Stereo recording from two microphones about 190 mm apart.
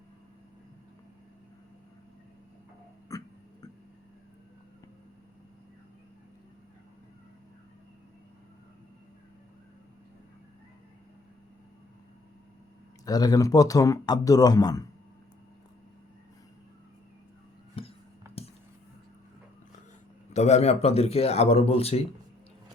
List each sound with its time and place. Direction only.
3.1 s a sound: 20° left (ahead or behind)
13.1 s speech: 20° left (ahead or behind)
17.8 s music: 30° left (ahead or behind)
20.3 s speech: 35° left (ahead or behind)